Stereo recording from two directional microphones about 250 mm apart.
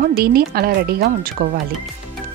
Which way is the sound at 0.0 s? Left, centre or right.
Right.